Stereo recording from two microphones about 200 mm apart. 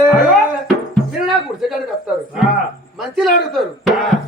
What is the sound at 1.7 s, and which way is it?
Speech, 5° right (ahead or behind).